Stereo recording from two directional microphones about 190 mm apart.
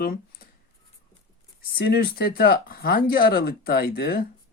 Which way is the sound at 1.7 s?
55° left (ahead or behind).